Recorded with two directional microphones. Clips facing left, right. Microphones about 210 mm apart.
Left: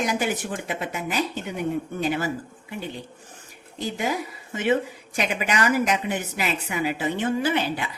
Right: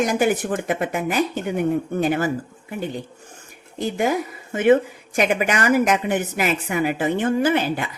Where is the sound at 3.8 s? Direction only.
50° right (ahead or behind).